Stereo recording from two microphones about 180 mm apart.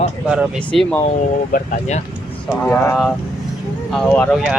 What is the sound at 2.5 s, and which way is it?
Speech, 10° left (ahead or behind).